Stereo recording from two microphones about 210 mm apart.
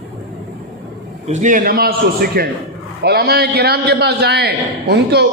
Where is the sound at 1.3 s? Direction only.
35° right (ahead or behind).